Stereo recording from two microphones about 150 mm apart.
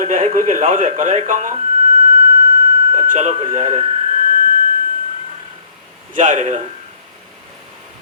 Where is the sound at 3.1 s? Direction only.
55° right (ahead or behind).